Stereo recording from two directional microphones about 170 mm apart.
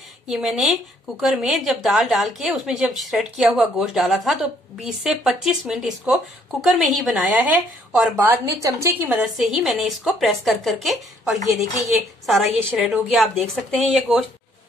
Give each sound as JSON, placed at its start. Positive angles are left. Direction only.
{"t": 0.3, "sound": "a woman's voice", "side_deg": 0}
{"t": 9.2, "sound": "speech", "side_deg": 0}